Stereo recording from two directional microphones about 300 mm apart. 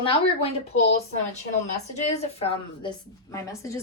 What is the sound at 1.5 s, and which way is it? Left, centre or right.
A woman's voice, left.